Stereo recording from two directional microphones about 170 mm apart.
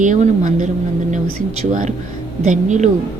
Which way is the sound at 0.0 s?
45° right (ahead or behind).